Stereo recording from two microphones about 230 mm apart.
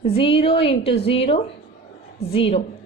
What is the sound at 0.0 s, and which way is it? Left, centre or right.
A woman's voice, left.